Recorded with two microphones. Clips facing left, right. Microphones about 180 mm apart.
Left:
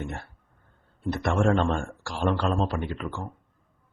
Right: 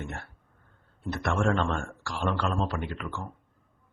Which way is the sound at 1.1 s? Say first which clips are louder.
Left 3 dB; 30° left (ahead or behind).